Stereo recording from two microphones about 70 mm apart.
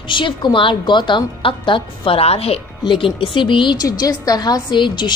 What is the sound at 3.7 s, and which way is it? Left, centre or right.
A woman's voice, left.